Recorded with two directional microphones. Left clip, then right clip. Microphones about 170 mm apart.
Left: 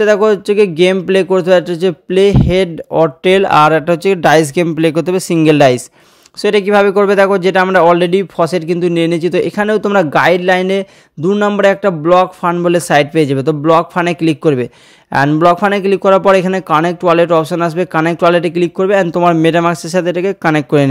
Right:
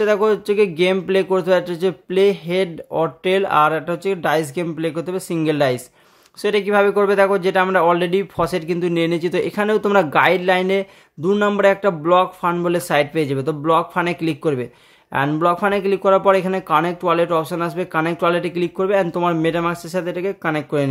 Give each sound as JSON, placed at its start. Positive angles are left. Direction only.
{"t": 0.0, "sound": "speech", "side_deg": 35}